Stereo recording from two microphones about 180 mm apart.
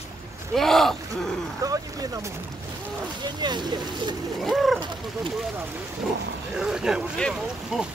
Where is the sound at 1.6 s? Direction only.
20° right (ahead or behind).